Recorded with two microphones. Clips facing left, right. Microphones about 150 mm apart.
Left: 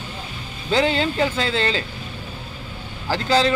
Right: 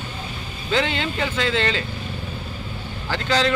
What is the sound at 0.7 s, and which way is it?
Speech, 35° left (ahead or behind).